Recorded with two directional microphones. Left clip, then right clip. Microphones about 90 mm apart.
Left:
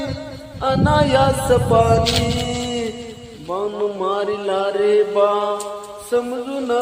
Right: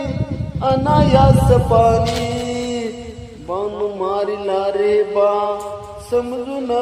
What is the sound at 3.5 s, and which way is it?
Mantra, 25° right (ahead or behind).